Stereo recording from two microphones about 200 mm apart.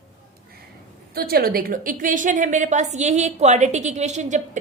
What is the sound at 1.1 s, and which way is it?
A woman's voice, 50° right (ahead or behind).